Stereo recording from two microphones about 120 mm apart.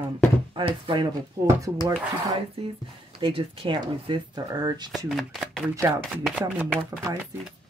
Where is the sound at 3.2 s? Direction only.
45° right (ahead or behind).